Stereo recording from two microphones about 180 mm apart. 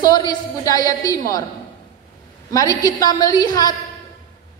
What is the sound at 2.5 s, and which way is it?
A woman's voice, 20° left (ahead or behind).